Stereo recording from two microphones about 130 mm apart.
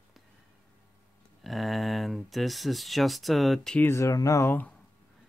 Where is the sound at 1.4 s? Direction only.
Centre (ahead or behind).